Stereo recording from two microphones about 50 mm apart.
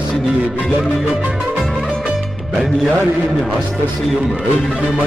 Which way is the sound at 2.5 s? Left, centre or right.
Centre.